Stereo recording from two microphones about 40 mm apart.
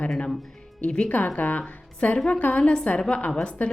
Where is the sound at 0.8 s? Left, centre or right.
Left.